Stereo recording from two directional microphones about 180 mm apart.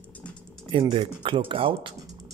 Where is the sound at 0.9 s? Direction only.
25° right (ahead or behind).